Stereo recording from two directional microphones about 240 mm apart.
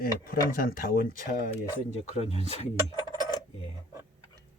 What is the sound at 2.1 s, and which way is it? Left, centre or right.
Speech, left.